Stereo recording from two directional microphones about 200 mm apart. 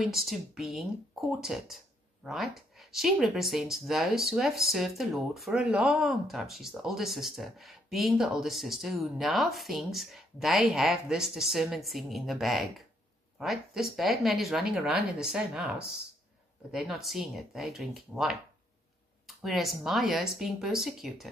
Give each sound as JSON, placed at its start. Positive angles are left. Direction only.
{"t": 0.0, "sound": "speech", "side_deg": 0}
{"t": 16.7, "sound": "speech", "side_deg": 0}